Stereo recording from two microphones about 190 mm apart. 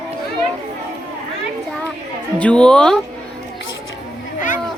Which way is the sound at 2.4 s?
5° left (ahead or behind).